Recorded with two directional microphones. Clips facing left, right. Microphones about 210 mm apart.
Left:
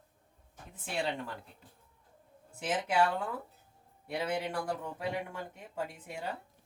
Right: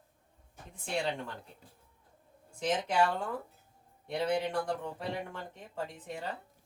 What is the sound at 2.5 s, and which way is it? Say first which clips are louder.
Speech: right 1 dB; 5° left (ahead or behind).